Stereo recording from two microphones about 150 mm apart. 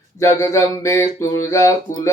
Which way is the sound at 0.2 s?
20° left (ahead or behind).